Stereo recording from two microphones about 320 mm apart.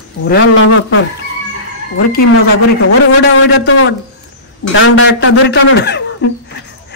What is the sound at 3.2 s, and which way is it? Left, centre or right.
Speech, left.